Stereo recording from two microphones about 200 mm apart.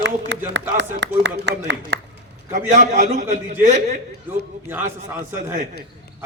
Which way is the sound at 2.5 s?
35° right (ahead or behind).